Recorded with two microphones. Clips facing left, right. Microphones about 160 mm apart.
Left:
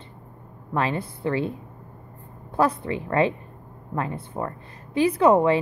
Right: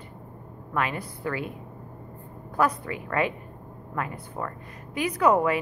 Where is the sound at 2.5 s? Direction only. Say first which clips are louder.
Left 3 dB; 25° left (ahead or behind).